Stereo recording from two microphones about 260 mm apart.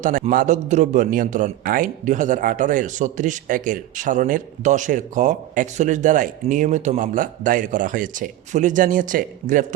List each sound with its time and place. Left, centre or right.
0.0 s a man's voice: right